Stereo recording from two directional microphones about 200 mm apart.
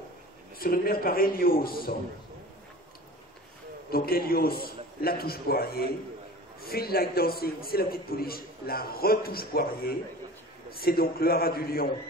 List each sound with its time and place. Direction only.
0.6 s a man's voice: 45° left (ahead or behind)
3.9 s a man's voice: 50° left (ahead or behind)